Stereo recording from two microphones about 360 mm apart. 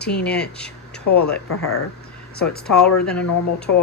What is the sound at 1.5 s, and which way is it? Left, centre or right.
Speech, left.